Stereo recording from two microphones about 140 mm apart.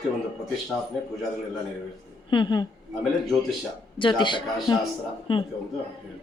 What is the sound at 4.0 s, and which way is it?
A man's voice, 35° left (ahead or behind).